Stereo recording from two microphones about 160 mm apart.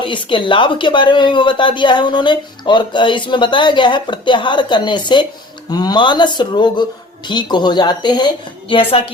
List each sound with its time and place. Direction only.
0.0 s speech: 30° left (ahead or behind)